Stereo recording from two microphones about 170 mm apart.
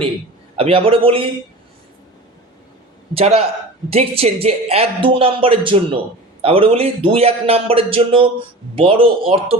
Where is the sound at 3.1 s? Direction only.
35° right (ahead or behind).